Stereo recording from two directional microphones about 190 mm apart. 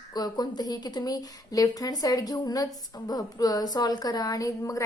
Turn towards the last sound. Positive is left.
turn(degrees=15)  # may be behind; listen again after turning